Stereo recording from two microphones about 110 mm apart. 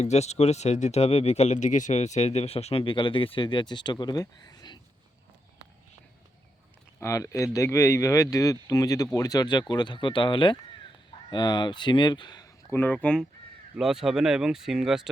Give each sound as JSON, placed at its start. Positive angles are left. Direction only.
{"t": 0.0, "sound": "speech", "side_deg": 90}
{"t": 2.8, "sound": "speech", "side_deg": 50}
{"t": 7.0, "sound": "speech", "side_deg": 30}
{"t": 12.7, "sound": "speech", "side_deg": 15}
{"t": 13.7, "sound": "speech", "side_deg": -5}